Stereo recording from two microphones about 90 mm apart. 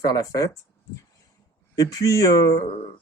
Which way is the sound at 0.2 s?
40° left (ahead or behind).